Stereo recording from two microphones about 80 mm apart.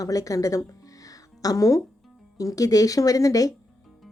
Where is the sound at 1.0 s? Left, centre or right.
Left.